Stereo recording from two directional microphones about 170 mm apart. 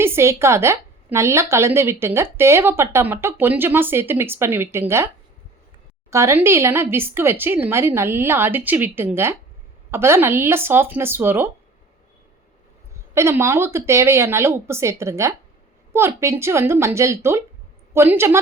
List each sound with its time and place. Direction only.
0.0 s a woman's voice: 15° right (ahead or behind)
13.1 s a woman's voice: 15° right (ahead or behind)